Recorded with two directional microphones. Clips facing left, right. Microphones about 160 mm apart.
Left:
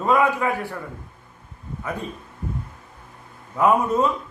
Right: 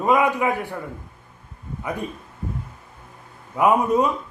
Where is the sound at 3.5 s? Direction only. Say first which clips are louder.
Right 1 dB; 15° right (ahead or behind).